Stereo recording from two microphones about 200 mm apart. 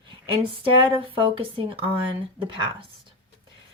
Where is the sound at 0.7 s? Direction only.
25° right (ahead or behind).